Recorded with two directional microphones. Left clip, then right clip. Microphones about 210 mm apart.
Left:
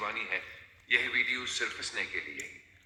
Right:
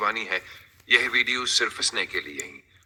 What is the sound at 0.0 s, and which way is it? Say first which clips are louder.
A man's voice: right 8 dB; 35° right (ahead or behind).